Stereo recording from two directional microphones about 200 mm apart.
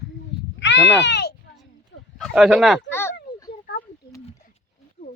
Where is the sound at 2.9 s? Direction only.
10° left (ahead or behind).